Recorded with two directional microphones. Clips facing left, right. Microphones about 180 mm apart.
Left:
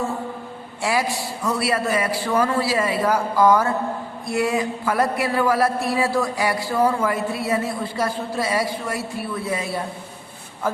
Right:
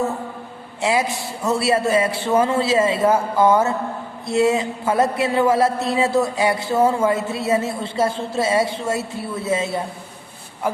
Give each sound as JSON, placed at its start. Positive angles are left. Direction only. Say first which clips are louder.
{"t": 0.8, "sound": "a man's voice", "louder": "right 2 dB", "side_deg": -20}